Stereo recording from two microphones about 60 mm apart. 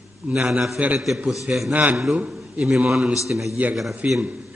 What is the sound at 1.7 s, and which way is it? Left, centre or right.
Speech, right.